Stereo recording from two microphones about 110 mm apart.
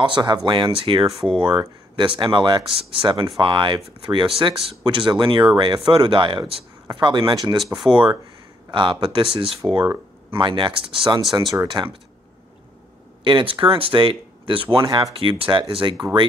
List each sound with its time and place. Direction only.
0.0 s speech: 45° right (ahead or behind)
1.0 s speech: centre (ahead or behind)
1.3 s speech: 45° right (ahead or behind)
13.2 s speech: 50° right (ahead or behind)